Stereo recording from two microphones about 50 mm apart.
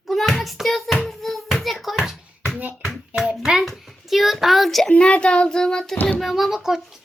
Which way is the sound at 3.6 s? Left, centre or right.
Centre.